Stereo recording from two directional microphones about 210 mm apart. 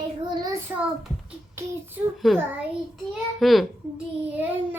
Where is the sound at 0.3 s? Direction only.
20° right (ahead or behind).